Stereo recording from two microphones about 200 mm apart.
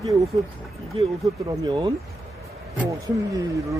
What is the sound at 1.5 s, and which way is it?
Speech, 20° right (ahead or behind).